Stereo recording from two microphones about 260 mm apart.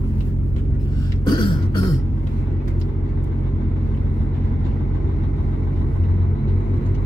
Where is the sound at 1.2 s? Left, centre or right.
Centre.